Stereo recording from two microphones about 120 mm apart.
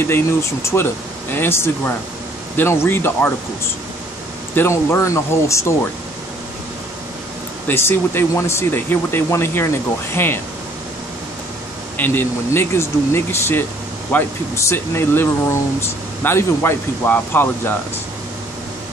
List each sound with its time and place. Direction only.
0.0 s speech: 20° left (ahead or behind)
4.6 s speech: 25° left (ahead or behind)
7.6 s speech: 20° left (ahead or behind)
12.0 s speech: 15° left (ahead or behind)